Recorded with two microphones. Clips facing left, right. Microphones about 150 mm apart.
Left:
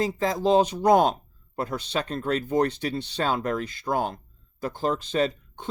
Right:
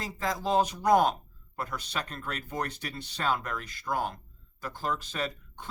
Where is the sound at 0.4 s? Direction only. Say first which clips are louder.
Left 6 dB; 25° left (ahead or behind).